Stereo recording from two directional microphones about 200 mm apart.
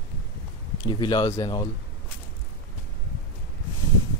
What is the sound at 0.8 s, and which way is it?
Speech, 20° left (ahead or behind).